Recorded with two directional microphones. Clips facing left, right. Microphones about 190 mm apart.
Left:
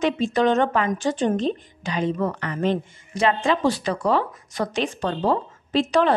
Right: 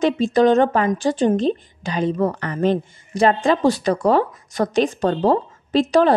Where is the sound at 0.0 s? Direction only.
35° right (ahead or behind).